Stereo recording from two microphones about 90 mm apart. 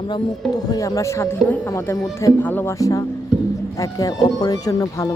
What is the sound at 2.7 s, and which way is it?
Speech, 40° left (ahead or behind).